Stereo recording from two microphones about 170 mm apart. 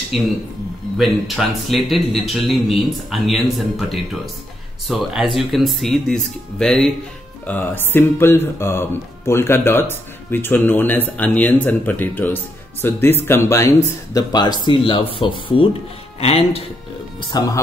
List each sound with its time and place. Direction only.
0.1 s a man's voice: centre (ahead or behind); by 16.6 s 35° left (ahead or behind)
17.3 s speech: 20° left (ahead or behind)